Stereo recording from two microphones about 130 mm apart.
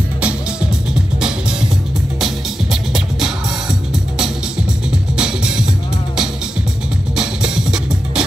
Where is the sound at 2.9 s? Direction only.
5° right (ahead or behind).